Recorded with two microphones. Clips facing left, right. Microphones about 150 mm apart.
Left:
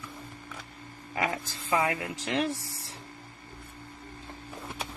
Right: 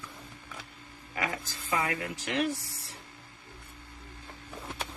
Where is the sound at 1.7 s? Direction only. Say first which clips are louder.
Left 3 dB; 30° left (ahead or behind).